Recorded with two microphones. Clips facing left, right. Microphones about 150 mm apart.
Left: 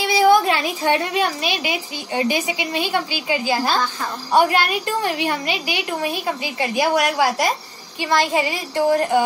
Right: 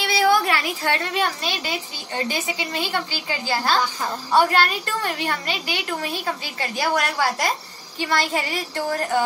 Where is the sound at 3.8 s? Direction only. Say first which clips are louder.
Left 1 dB; 15° right (ahead or behind).